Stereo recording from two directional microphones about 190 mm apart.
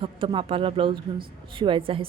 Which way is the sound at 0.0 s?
25° right (ahead or behind).